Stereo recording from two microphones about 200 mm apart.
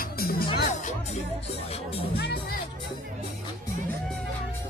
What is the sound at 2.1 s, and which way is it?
Speech, 55° left (ahead or behind).